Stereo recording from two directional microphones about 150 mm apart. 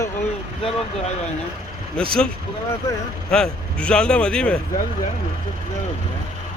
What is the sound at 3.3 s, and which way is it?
Speech, 5° left (ahead or behind).